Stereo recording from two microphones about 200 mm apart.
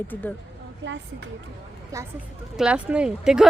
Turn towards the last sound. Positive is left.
turn(degrees=-5)  # may be behind; listen again after turning